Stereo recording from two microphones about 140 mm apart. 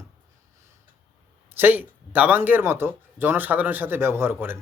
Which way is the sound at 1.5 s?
15° right (ahead or behind).